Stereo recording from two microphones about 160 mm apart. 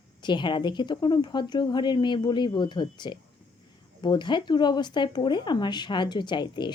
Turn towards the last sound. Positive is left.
turn(degrees=30)  # may be behind; listen again after turning